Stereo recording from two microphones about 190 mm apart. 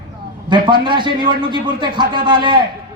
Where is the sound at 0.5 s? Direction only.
25° right (ahead or behind).